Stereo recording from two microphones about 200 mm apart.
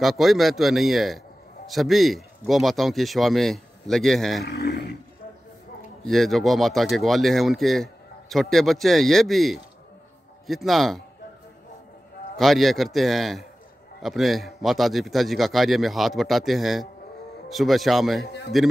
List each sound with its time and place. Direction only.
0.0 s speech: centre (ahead or behind)
4.5 s speech: 55° left (ahead or behind)
6.0 s speech: centre (ahead or behind)
12.4 s speech: centre (ahead or behind)
18.2 s a man's voice: 60° left (ahead or behind)